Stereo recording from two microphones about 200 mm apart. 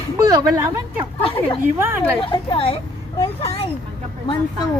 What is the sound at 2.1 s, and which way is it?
A woman's voice, 25° left (ahead or behind).